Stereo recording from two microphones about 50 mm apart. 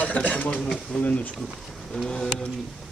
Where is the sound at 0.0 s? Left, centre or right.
Left.